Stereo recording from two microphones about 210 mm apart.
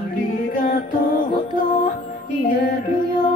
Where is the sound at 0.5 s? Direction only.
40° left (ahead or behind).